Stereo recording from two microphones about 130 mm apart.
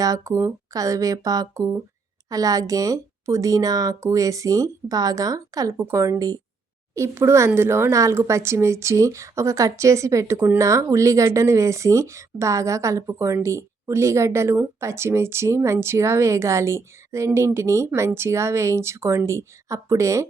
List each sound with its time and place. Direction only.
0.0 s speech: 25° right (ahead or behind)